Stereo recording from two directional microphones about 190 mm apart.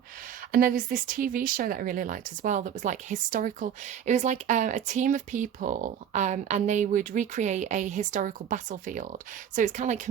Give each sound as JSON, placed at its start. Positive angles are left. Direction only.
{"t": 0.5, "sound": "speech", "side_deg": -45}